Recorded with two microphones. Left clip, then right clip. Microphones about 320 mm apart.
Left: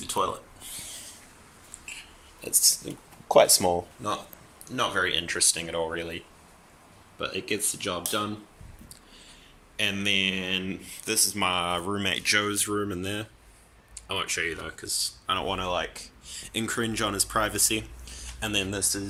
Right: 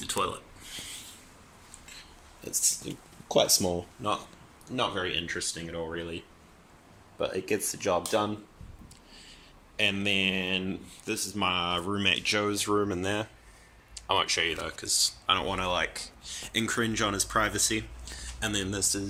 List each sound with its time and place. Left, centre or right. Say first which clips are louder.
0.0 s a sound: left 3 dB; centre
2.0 s a sound: left 4 dB; centre
4.6 s speech: left 4 dB; centre
7.2 s speech: right 1 dB; centre
9.7 s speech: left 1 dB; centre
14.5 s speech: right 2 dB; centre